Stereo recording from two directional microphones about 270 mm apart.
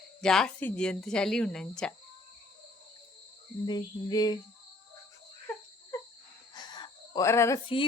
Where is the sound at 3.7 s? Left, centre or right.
Centre.